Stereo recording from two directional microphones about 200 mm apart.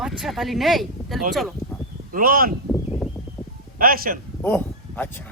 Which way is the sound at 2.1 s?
45° right (ahead or behind).